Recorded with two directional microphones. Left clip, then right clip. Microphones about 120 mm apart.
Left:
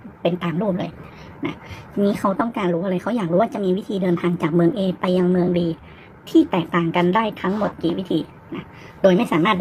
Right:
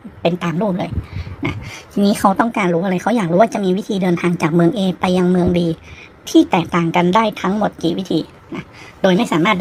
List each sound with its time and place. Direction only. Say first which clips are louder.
0.2 s a woman's voice: right 4 dB; 20° right (ahead or behind)
1.4 s a woman's voice: right 4 dB; 25° right (ahead or behind); by 9.6 s 5° right (ahead or behind)